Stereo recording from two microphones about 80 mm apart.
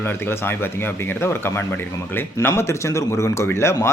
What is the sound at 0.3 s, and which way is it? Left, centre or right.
Speech, left.